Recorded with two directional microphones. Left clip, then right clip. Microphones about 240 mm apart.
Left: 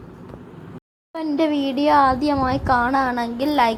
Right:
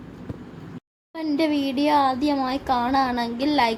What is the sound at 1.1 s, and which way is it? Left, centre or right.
A woman's voice, centre.